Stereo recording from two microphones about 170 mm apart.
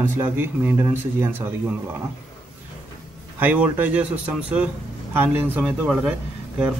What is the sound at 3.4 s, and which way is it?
A man's voice, 10° right (ahead or behind).